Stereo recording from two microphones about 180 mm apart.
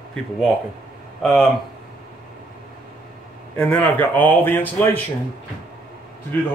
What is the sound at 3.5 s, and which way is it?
A man's voice, 5° left (ahead or behind).